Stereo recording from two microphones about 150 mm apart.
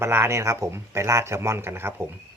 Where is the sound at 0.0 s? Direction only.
15° right (ahead or behind).